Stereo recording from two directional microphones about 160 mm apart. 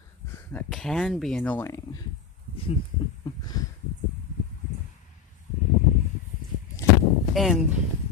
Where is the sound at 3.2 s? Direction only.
25° left (ahead or behind).